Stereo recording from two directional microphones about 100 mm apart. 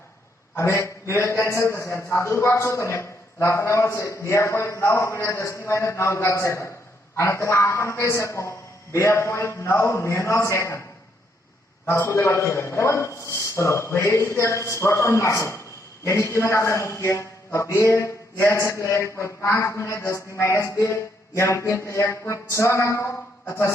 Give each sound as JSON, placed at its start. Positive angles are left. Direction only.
{"t": 0.5, "sound": "a man's voice", "side_deg": 25}
{"t": 11.9, "sound": "a man's voice", "side_deg": 25}